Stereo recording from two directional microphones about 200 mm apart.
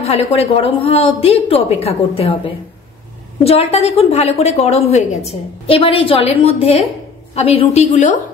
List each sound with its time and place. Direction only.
0.0 s a woman's voice: 30° left (ahead or behind)